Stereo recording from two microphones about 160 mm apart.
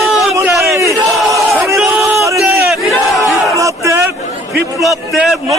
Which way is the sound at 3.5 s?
20° right (ahead or behind).